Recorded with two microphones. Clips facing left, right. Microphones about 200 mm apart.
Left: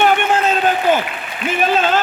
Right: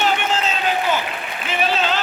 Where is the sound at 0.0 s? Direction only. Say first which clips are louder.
Left 6 dB; 55° left (ahead or behind).